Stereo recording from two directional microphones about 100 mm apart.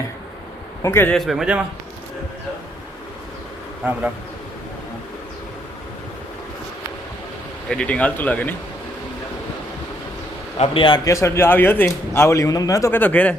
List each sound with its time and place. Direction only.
0.8 s a man's voice: 25° left (ahead or behind)
1.1 s a man's voice: centre (ahead or behind)
7.7 s speech: 10° left (ahead or behind)
10.6 s a man's voice: 55° left (ahead or behind)
11.0 s speech: 30° left (ahead or behind)
12.9 s speech: 15° left (ahead or behind)